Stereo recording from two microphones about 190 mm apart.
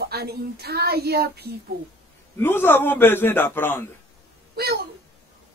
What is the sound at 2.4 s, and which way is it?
Speech, 10° left (ahead or behind).